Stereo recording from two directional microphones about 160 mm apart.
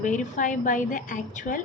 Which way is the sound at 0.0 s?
55° left (ahead or behind).